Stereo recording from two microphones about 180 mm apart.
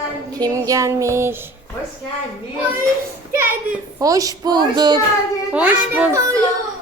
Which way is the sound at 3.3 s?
10° right (ahead or behind).